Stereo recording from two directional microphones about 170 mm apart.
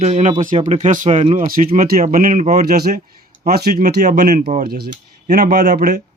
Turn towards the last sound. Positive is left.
turn(degrees=-70)  # may be behind; listen again after turning